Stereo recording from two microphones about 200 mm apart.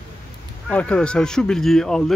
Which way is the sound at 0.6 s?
5° left (ahead or behind).